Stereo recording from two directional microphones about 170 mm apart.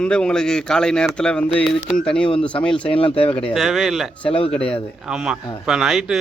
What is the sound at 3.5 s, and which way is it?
Speech, centre (ahead or behind).